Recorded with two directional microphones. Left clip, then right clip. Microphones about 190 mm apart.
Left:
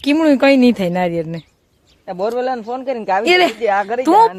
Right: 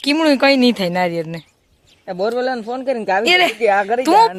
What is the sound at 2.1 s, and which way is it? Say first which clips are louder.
A man's voice: even; 50° right (ahead or behind).